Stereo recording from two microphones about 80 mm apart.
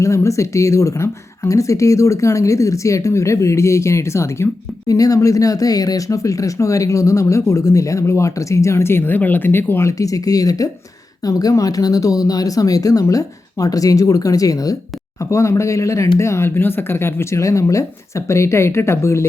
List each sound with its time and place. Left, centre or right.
0.0 s speech: left
4.9 s speech: left
10.0 s speech: left